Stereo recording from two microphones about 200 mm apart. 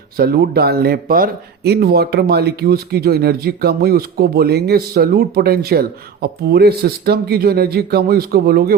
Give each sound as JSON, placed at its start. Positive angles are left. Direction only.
{"t": 0.2, "sound": "speech", "side_deg": -50}